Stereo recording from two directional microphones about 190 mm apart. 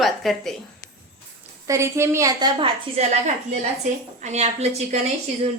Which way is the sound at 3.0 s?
35° right (ahead or behind).